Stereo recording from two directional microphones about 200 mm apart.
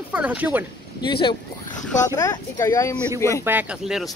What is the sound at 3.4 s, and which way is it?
Speech, 10° right (ahead or behind).